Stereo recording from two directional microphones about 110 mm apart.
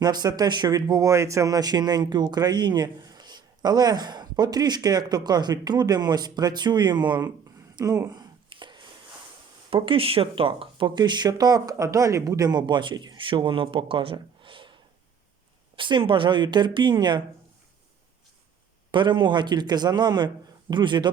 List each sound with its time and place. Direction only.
0.0 s speech: 35° right (ahead or behind)
7.8 s speech: 30° right (ahead or behind)
8.4 s chopping: 45° right (ahead or behind)
9.6 s speech: 50° right (ahead or behind)
18.9 s speech: 45° right (ahead or behind)